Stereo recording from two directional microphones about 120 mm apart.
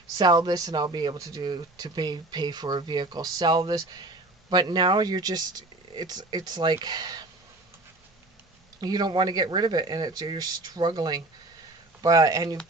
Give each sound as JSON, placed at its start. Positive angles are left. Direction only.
{"t": 0.2, "sound": "speech", "side_deg": -35}
{"t": 8.8, "sound": "speech", "side_deg": -35}